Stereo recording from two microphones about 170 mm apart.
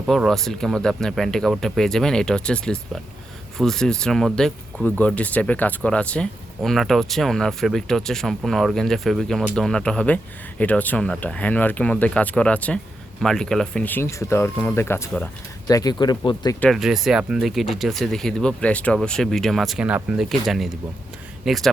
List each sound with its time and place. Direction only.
0.1 s speech: centre (ahead or behind); by 16.6 s 25° left (ahead or behind)
16.6 s speech: centre (ahead or behind)